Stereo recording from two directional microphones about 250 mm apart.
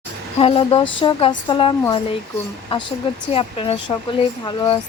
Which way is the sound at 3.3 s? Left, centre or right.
Left.